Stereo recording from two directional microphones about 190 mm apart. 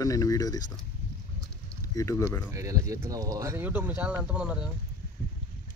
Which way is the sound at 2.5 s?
15° right (ahead or behind).